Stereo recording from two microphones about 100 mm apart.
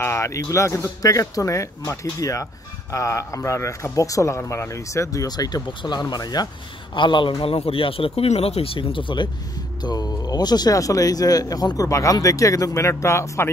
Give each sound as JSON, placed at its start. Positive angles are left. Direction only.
{"t": 0.0, "sound": "a man's voice", "side_deg": 30}
{"t": 7.0, "sound": "speech", "side_deg": 55}
{"t": 9.8, "sound": "a man's voice", "side_deg": 40}